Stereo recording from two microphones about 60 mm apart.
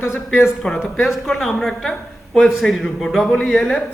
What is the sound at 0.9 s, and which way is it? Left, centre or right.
Speech, centre.